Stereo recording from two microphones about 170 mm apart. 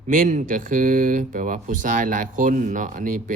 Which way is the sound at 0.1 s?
50° right (ahead or behind).